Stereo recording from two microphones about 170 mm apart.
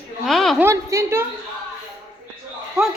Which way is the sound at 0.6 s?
15° right (ahead or behind).